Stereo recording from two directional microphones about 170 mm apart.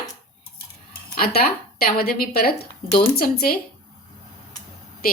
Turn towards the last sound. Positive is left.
turn(degrees=60)  # may be behind; listen again after turning